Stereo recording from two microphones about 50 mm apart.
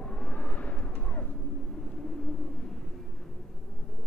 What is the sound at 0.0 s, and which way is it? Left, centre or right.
Vehicle, left.